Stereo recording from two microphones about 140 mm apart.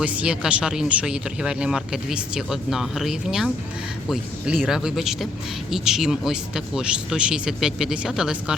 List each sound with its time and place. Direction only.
0.0 s speech: 10° right (ahead or behind)